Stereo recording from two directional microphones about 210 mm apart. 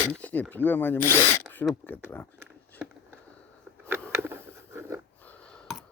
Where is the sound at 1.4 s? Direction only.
10° left (ahead or behind).